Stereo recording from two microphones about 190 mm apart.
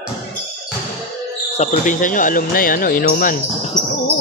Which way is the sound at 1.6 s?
40° left (ahead or behind).